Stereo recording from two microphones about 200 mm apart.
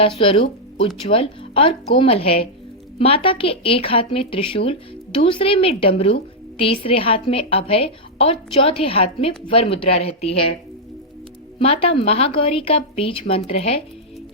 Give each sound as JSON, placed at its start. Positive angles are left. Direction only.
{"t": 0.0, "sound": "a woman's voice", "side_deg": 25}
{"t": 11.6, "sound": "a woman's voice", "side_deg": 30}